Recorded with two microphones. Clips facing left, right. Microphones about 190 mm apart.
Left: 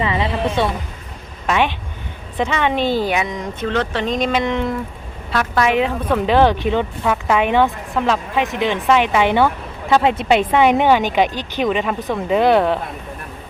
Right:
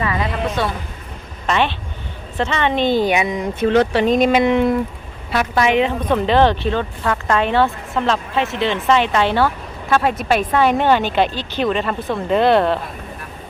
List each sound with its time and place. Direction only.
0.0 s speech: 25° left (ahead or behind)
1.5 s speech: 10° left (ahead or behind)
3.2 s speech: 5° right (ahead or behind); by 12.8 s 10° left (ahead or behind)